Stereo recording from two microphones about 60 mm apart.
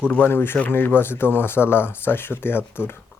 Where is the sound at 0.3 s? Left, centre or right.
Left.